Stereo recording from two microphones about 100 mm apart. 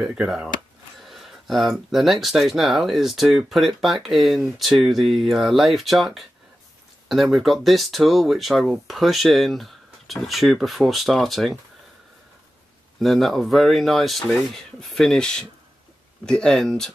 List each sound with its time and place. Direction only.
0.0 s speech: 10° right (ahead or behind)
13.0 s speech: centre (ahead or behind)